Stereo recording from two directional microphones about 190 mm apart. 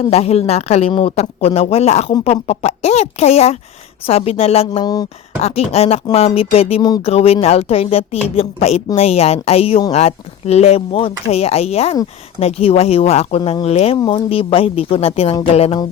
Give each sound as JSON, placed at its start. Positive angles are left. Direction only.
{"t": 0.1, "sound": "speech", "side_deg": 35}